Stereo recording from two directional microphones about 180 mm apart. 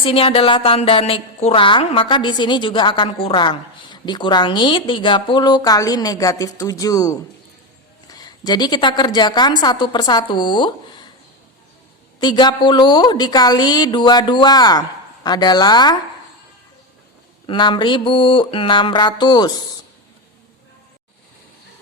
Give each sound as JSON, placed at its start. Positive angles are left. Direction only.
{"t": 0.0, "sound": "a woman's voice", "side_deg": 30}
{"t": 12.2, "sound": "a woman's voice", "side_deg": 25}
{"t": 17.4, "sound": "a woman's voice", "side_deg": 25}